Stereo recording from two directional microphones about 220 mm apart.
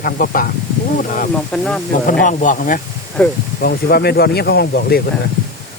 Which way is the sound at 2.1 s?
35° left (ahead or behind).